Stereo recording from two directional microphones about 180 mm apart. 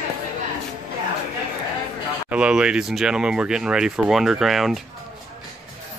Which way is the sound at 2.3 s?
5° right (ahead or behind).